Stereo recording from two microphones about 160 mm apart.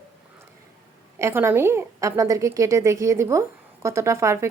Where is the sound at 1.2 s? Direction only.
15° right (ahead or behind).